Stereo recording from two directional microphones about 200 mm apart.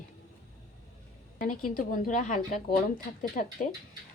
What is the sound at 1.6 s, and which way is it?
Speech, 45° left (ahead or behind).